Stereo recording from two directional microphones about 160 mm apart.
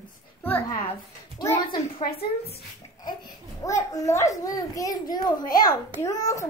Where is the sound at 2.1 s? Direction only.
75° left (ahead or behind).